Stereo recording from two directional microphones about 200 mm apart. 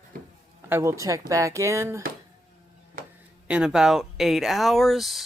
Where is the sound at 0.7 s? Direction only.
15° right (ahead or behind).